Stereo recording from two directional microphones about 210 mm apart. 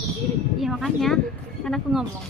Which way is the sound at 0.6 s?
Centre (ahead or behind).